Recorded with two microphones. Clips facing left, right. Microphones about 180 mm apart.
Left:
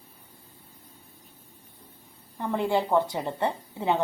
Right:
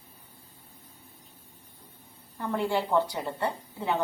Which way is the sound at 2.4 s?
20° left (ahead or behind).